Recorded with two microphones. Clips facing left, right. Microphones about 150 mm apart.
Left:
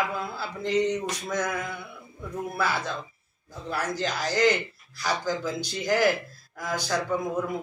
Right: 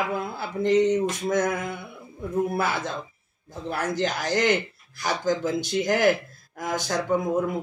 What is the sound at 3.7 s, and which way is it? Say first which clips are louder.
A man's voice: right 3 dB; 50° right (ahead or behind).